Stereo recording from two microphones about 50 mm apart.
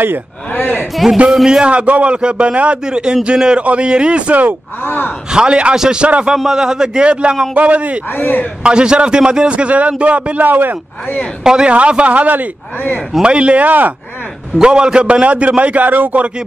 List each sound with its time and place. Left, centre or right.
0.5 s a man's voice: left
1.3 s a man's voice: centre
1.6 s a man's voice: right
4.8 s speech: left
5.3 s a man's voice: centre
6.2 s a man's voice: centre; by 8.0 s right
8.1 s speech: left
8.6 s a man's voice: centre
10.4 s speech: right
11.4 s a man's voice: centre
11.7 s a man's voice: right
13.2 s a man's voice: right
13.7 s speech: right
14.6 s a man's voice: centre; by 16.3 s right